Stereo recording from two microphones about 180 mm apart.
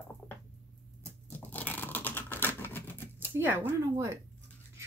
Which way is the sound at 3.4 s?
10° right (ahead or behind).